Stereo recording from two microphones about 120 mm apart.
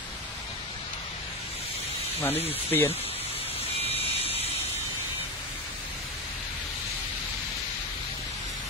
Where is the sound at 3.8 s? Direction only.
55° left (ahead or behind).